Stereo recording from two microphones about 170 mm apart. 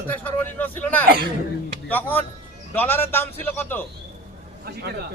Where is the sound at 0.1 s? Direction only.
10° left (ahead or behind).